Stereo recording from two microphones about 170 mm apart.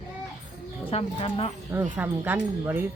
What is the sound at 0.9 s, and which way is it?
Speech, 35° left (ahead or behind).